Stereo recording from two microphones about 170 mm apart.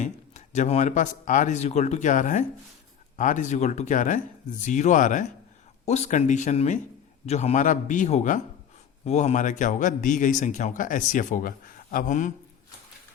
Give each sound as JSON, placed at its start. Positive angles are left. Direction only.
{"t": 0.0, "sound": "a man's voice", "side_deg": 45}